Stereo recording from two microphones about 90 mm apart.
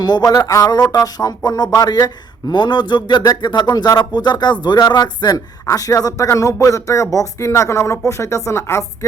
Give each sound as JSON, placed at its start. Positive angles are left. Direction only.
{"t": 0.0, "sound": "speech", "side_deg": 50}
{"t": 2.5, "sound": "speech", "side_deg": 60}